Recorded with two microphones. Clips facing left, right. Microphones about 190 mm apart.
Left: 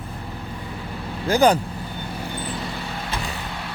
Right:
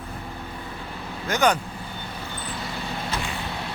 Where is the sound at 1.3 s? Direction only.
35° left (ahead or behind).